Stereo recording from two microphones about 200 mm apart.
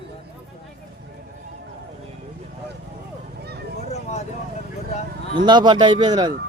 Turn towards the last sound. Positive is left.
turn(degrees=-20)  # may be behind; listen again after turning